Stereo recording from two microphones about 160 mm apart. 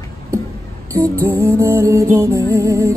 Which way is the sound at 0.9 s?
20° right (ahead or behind).